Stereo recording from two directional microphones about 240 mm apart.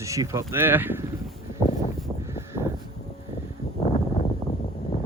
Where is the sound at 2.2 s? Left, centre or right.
Centre.